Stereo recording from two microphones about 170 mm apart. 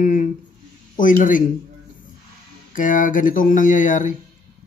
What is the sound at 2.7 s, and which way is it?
Speech, 50° left (ahead or behind).